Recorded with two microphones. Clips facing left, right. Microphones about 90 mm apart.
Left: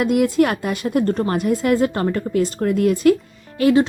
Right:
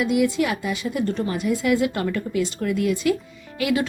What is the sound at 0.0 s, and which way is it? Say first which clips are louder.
A woman's voice: left 4 dB; 50° left (ahead or behind).